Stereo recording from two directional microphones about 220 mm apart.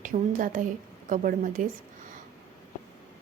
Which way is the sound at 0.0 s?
35° right (ahead or behind).